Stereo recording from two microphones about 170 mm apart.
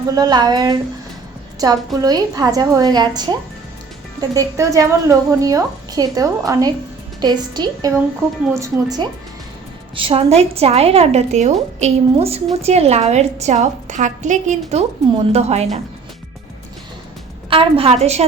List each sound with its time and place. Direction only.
0.1 s a woman's voice: 25° right (ahead or behind)
9.9 s a woman's voice: 35° right (ahead or behind)
17.5 s a woman's voice: 35° right (ahead or behind)